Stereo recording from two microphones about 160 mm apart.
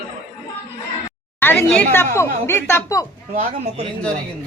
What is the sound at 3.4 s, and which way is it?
Speech, 45° right (ahead or behind).